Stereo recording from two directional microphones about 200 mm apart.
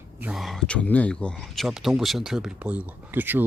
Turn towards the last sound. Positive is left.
turn(degrees=-10)  # may be behind; listen again after turning